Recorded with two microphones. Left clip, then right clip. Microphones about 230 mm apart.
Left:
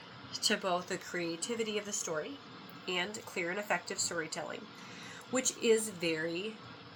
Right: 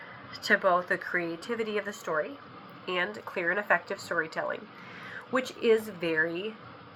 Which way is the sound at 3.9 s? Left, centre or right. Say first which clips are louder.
Right 4 dB; centre.